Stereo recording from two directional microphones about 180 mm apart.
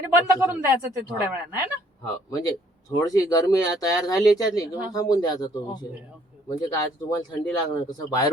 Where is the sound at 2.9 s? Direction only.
20° left (ahead or behind).